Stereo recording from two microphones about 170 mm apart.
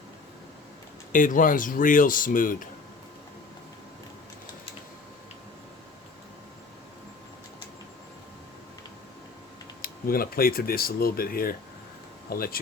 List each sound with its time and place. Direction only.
1.1 s speech: 50° left (ahead or behind)
9.8 s speech: 60° left (ahead or behind)